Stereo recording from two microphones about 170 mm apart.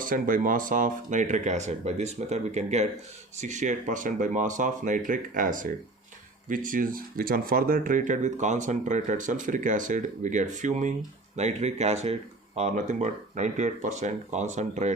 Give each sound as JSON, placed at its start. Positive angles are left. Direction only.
{"t": 0.0, "sound": "speech", "side_deg": -50}